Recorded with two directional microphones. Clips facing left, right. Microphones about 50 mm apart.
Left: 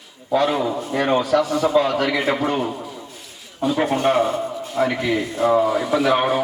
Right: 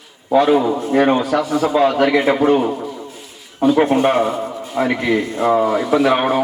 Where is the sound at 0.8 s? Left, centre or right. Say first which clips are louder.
Right 5 dB; right.